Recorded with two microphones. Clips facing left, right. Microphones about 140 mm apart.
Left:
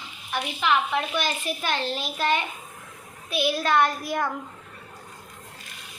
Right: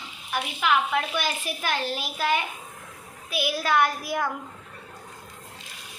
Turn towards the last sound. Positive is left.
turn(degrees=-5)  # may be behind; listen again after turning